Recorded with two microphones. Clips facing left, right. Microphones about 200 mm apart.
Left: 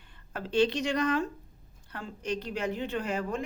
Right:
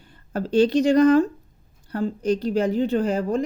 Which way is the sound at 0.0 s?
40° right (ahead or behind).